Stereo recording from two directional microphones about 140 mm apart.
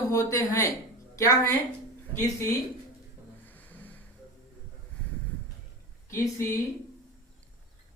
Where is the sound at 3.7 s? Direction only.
10° left (ahead or behind).